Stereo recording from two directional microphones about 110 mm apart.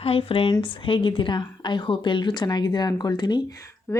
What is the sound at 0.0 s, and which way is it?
A woman's voice, 60° left (ahead or behind).